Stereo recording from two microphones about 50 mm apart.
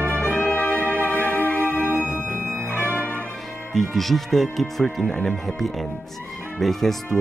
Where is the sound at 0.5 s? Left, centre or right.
Left.